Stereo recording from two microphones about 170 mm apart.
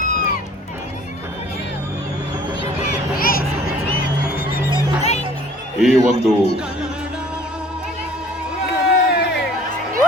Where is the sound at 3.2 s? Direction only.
60° left (ahead or behind).